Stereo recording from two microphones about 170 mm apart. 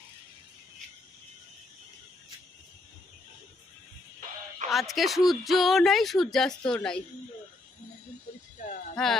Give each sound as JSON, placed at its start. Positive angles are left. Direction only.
{"t": 4.6, "sound": "speech", "side_deg": 0}
{"t": 8.9, "sound": "speech", "side_deg": 0}